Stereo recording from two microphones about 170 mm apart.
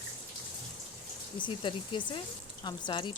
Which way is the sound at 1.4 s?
30° left (ahead or behind).